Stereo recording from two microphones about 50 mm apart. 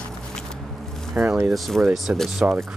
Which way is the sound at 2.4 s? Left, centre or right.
Right.